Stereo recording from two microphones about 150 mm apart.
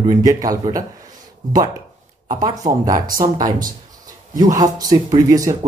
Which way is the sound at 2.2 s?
25° right (ahead or behind).